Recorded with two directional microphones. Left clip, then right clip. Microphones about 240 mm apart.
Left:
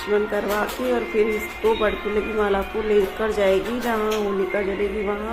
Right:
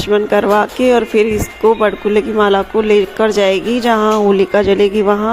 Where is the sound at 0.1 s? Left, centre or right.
Right.